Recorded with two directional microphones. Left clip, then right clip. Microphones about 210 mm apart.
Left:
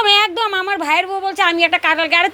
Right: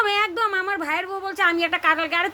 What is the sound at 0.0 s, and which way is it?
A woman's voice, 15° left (ahead or behind).